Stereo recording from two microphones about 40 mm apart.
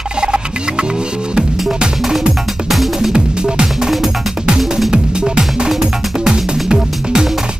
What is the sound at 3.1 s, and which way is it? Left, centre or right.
Music, right.